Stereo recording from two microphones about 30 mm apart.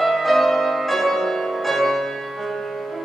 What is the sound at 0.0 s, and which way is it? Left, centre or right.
Music, centre.